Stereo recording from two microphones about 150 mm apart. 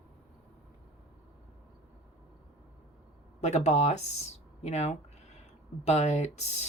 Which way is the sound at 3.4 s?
45° left (ahead or behind).